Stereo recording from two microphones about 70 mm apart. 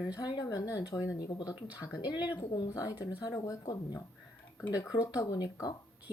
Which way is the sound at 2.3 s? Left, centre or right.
Left.